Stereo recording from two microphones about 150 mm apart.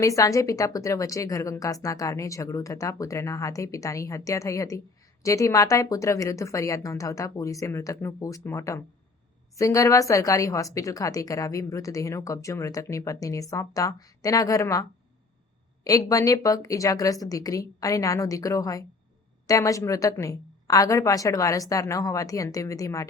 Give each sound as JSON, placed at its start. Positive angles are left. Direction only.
{"t": 0.0, "sound": "a woman's voice", "side_deg": 20}